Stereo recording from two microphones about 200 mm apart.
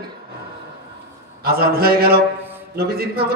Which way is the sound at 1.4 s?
50° right (ahead or behind).